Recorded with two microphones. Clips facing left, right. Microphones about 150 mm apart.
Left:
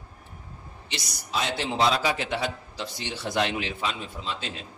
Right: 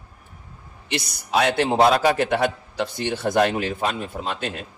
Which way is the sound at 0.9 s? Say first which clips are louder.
Right 9 dB; 60° right (ahead or behind).